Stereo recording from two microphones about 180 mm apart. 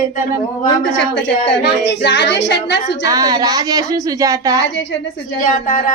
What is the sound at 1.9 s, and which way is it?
Female singing, 75° left (ahead or behind).